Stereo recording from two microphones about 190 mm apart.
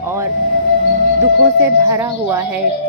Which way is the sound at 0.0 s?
15° right (ahead or behind).